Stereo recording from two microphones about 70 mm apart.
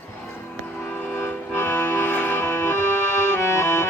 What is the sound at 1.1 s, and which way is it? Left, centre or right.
Music, left.